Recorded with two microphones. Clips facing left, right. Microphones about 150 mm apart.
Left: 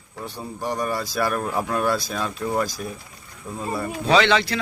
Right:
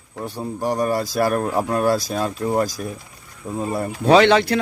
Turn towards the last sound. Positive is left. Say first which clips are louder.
# right 5 dB
turn(degrees=-50)  # may be behind; listen again after turning